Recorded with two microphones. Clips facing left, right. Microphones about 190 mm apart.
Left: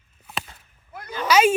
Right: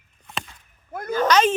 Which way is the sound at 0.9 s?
45° right (ahead or behind).